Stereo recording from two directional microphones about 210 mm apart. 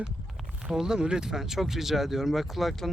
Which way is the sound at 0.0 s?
5° right (ahead or behind).